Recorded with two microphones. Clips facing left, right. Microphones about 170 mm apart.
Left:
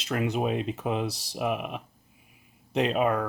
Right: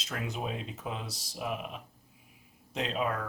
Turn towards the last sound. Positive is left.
turn(degrees=65)  # may be behind; listen again after turning